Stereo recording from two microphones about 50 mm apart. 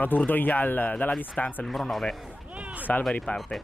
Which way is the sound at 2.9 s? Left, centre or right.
Left.